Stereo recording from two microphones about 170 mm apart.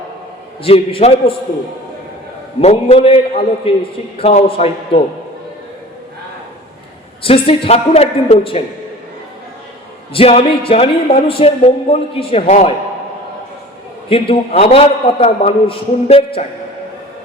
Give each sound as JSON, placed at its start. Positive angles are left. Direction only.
{"t": 0.6, "sound": "speech", "side_deg": 35}
{"t": 2.6, "sound": "speech", "side_deg": 40}
{"t": 7.2, "sound": "speech", "side_deg": 35}
{"t": 10.1, "sound": "speech", "side_deg": 35}
{"t": 14.1, "sound": "speech", "side_deg": 35}